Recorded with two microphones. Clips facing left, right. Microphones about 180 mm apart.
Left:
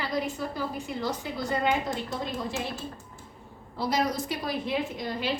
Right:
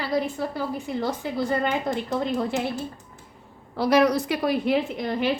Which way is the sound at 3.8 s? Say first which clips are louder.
Right 8 dB; 70° right (ahead or behind).